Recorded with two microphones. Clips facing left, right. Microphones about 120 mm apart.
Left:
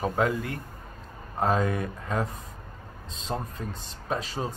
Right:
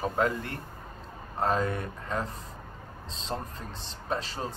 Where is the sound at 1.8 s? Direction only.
10° left (ahead or behind).